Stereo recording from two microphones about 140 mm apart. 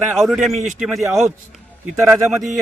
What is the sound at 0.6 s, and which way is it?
Speech, 65° right (ahead or behind).